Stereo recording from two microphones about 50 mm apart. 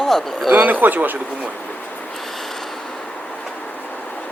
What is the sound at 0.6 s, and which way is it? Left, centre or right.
Speech, right.